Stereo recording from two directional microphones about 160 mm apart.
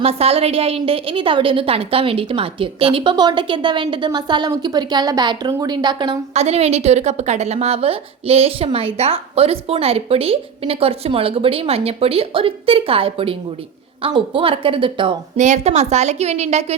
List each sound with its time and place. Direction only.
0.0 s a woman's voice: 40° right (ahead or behind)
6.3 s a woman's voice: 40° right (ahead or behind)
15.4 s a woman's voice: 45° right (ahead or behind)